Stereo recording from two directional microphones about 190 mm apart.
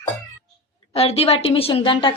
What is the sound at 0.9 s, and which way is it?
Speech, 30° left (ahead or behind).